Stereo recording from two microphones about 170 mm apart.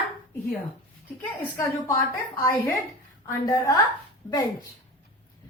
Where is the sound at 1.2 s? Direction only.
10° left (ahead or behind).